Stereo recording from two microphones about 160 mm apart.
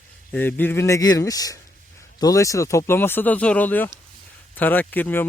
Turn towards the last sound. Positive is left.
turn(degrees=10)  # may be behind; listen again after turning